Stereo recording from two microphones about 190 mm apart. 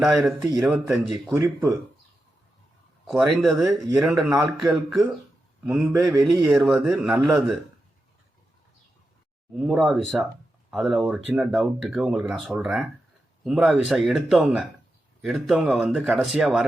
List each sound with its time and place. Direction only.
0.2 s speech: centre (ahead or behind)
1.4 s speech: 20° right (ahead or behind)
3.1 s speech: centre (ahead or behind)
9.6 s speech: 5° right (ahead or behind)